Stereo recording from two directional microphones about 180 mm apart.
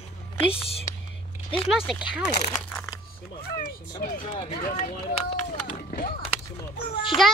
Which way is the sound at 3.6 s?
50° left (ahead or behind).